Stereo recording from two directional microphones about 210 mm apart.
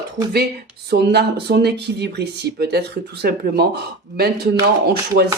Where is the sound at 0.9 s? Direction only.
50° right (ahead or behind).